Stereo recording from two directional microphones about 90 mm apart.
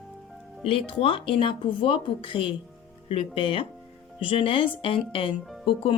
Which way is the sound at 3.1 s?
90° left.